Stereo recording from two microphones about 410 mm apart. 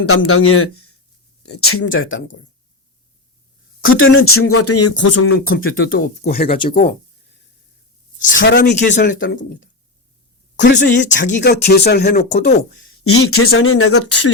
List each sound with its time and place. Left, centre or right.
0.0 s speech: left
3.8 s speech: left
8.2 s speech: left
13.1 s speech: left